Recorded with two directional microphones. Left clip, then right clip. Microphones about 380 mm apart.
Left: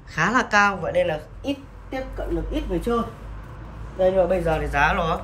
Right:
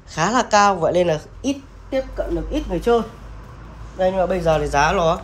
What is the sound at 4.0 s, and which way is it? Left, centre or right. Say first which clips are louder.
Speech: even; centre.